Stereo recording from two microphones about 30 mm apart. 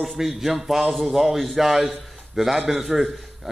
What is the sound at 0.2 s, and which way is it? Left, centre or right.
A man's voice, centre.